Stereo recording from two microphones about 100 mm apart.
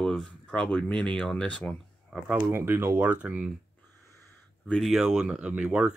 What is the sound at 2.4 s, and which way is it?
Speech, 20° right (ahead or behind).